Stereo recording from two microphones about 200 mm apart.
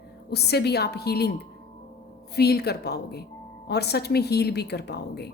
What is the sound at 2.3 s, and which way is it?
A woman's voice, 50° left (ahead or behind).